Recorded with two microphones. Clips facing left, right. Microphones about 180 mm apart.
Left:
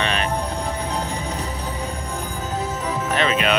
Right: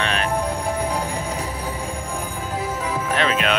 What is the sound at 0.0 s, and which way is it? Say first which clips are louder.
Music: even; centre (ahead or behind).